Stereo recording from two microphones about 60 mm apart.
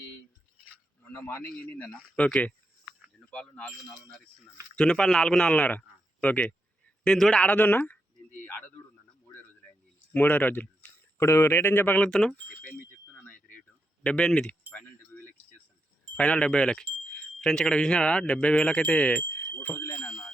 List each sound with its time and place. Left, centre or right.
1.5 s speech: left
3.2 s speech: centre
4.8 s a man's voice: centre
7.4 s speech: left
8.4 s a sound: left
10.1 s speech: left
11.2 s speech: left
11.9 s speech: centre
14.0 s speech: centre
14.7 s keys jangling: left
16.1 s speech: centre
19.3 s a sound: left
20.0 s music: left